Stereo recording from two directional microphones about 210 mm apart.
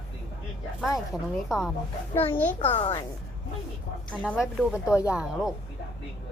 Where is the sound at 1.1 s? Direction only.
Centre (ahead or behind).